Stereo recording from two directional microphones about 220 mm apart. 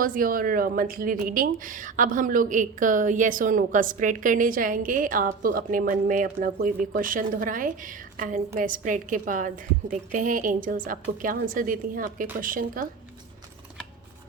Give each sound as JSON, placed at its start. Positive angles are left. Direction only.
{"t": 0.0, "sound": "speech", "side_deg": -40}